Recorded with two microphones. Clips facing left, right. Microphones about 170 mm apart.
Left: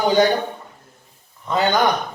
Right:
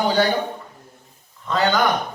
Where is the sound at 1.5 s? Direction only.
20° left (ahead or behind).